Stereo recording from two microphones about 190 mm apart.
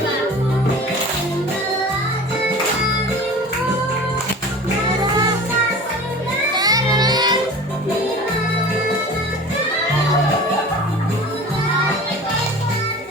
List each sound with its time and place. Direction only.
6.6 s music: 20° right (ahead or behind)